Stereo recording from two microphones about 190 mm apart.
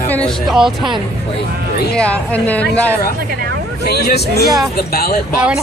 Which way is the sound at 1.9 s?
5° left (ahead or behind).